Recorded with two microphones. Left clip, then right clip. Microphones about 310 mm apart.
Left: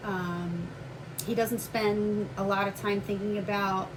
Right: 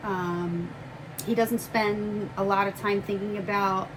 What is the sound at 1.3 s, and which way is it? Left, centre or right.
A woman's voice, right.